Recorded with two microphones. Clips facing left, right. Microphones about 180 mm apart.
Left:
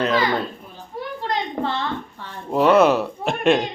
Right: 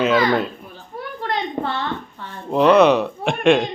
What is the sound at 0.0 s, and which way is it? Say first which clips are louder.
Speech: right 3 dB; 5° right (ahead or behind).